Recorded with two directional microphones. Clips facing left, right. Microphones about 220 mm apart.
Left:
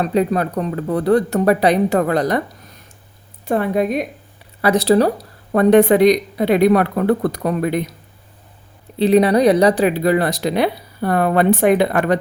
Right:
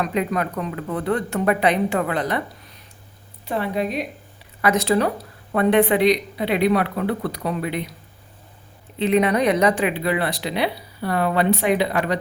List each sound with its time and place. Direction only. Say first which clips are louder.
0.0 s speech: left 5 dB; 35° left (ahead or behind); by 4.0 s 50° left (ahead or behind)
4.6 s speech: left 5 dB; 35° left (ahead or behind)
9.0 s speech: left 6 dB; 35° left (ahead or behind); by 12.1 s 50° left (ahead or behind)